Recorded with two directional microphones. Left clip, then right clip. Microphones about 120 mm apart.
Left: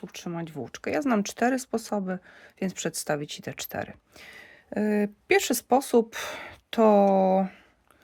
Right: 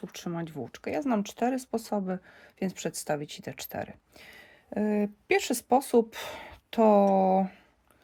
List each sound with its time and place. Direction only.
0.0 s speech: 10° left (ahead or behind)
0.6 s speech: 30° left (ahead or behind)